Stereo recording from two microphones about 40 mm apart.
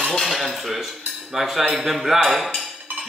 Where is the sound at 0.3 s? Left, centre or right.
Centre.